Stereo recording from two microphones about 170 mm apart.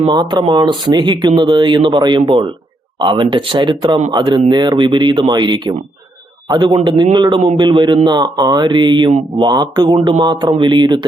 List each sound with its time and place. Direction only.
0.1 s speech: 25° right (ahead or behind)